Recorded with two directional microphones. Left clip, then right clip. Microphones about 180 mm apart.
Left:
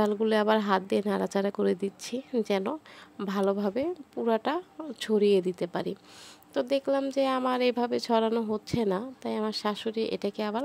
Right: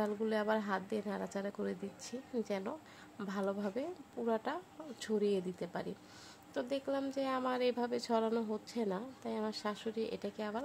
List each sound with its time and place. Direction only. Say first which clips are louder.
0.0 s speech: left 10 dB; 50° left (ahead or behind)